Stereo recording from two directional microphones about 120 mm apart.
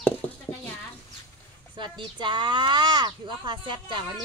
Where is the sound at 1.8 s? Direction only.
40° right (ahead or behind).